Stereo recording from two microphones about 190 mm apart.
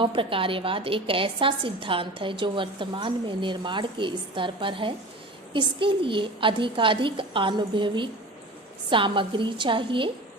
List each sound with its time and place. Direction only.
0.0 s a woman's voice: 25° right (ahead or behind)